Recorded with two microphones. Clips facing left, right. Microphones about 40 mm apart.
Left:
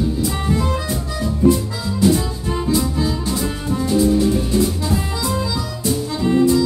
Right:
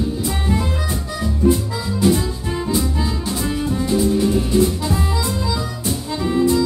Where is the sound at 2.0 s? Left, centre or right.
Centre.